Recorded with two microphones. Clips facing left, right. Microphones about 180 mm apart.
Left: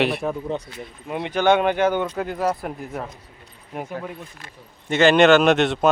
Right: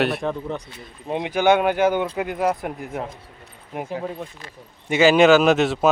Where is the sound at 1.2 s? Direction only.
10° right (ahead or behind).